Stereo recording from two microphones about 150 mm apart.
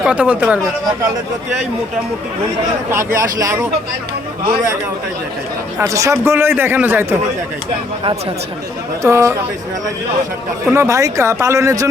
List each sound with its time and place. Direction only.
0.0 s a man's voice: 5° right (ahead or behind)
2.9 s a man's voice: 15° right (ahead or behind)
5.8 s a man's voice: 20° right (ahead or behind)
9.0 s speech: 20° right (ahead or behind)
10.8 s speech: 20° right (ahead or behind)